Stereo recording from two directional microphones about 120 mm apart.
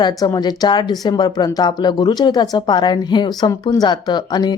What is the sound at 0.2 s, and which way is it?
Speech, 30° left (ahead or behind).